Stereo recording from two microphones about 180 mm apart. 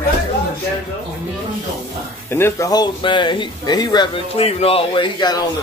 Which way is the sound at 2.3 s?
15° left (ahead or behind).